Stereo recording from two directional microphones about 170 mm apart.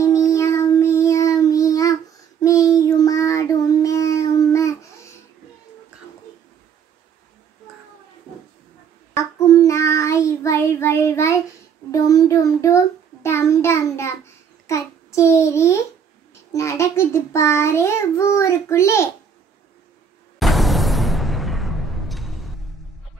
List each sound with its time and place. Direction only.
0.0 s child singing: 20° left (ahead or behind)
9.1 s child singing: 20° left (ahead or behind)
20.3 s music: centre (ahead or behind)